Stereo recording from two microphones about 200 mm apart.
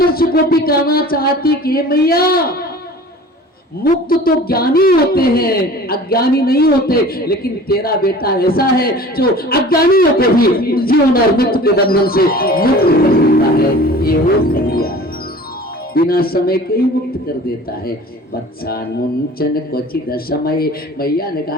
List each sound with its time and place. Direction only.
0.0 s a woman's voice: 50° left (ahead or behind)
4.1 s a woman's voice: 50° left (ahead or behind)
13.6 s music: 50° left (ahead or behind)
16.0 s a woman's voice: 50° left (ahead or behind)
19.4 s a woman's voice: 50° left (ahead or behind)